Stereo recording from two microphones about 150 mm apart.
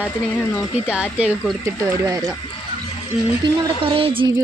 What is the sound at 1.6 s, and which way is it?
Speech, 25° right (ahead or behind).